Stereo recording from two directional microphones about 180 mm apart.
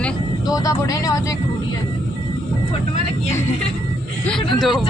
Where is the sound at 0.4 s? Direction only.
20° left (ahead or behind).